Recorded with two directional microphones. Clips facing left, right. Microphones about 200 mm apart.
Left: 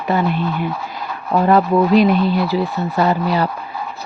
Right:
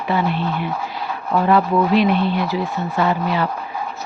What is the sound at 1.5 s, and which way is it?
Speech, 40° left (ahead or behind).